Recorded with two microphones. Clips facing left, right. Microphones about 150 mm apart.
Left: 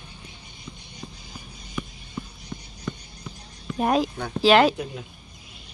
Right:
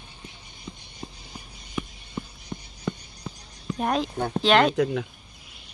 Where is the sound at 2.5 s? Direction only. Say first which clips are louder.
Right 1 dB; 30° right (ahead or behind).